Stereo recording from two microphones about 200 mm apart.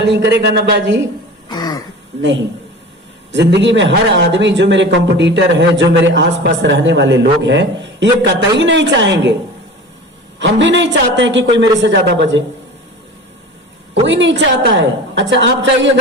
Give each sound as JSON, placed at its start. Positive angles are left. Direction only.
{"t": 0.1, "sound": "a man's voice", "side_deg": -60}
{"t": 1.5, "sound": "throat clearing", "side_deg": 20}
{"t": 3.3, "sound": "a man's voice", "side_deg": -60}
{"t": 10.4, "sound": "a man's voice", "side_deg": -60}
{"t": 14.0, "sound": "a man's voice", "side_deg": -65}